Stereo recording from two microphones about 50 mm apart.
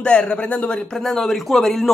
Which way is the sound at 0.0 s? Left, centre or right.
Left.